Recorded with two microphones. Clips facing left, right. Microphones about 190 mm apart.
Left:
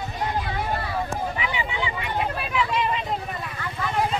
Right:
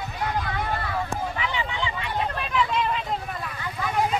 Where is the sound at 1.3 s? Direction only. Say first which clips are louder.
Left 1 dB; 10° left (ahead or behind).